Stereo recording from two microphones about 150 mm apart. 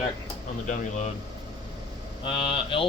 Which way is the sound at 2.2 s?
35° left (ahead or behind).